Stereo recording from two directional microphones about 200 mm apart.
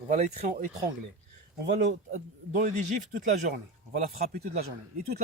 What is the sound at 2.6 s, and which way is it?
Speech, 35° right (ahead or behind).